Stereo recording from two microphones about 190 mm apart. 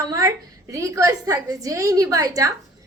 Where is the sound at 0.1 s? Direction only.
15° right (ahead or behind).